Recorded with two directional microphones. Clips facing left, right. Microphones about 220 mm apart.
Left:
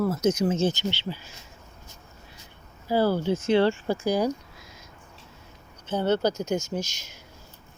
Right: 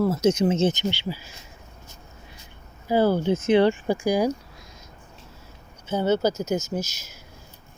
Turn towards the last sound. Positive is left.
turn(degrees=-5)  # may be behind; listen again after turning